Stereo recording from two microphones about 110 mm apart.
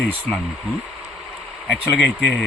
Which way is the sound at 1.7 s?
10° left (ahead or behind).